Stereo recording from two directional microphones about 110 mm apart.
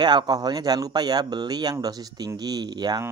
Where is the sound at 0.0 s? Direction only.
40° right (ahead or behind).